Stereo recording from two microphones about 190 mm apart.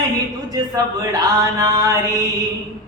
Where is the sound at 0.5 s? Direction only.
20° right (ahead or behind).